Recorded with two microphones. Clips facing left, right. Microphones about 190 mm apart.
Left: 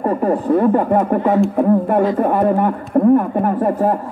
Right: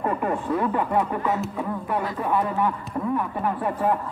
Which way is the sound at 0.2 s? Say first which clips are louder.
Left 9 dB; 40° left (ahead or behind).